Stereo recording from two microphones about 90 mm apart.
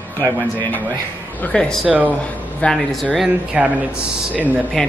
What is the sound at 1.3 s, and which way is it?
Speech, 10° left (ahead or behind).